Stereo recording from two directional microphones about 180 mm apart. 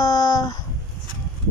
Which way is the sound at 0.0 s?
20° left (ahead or behind).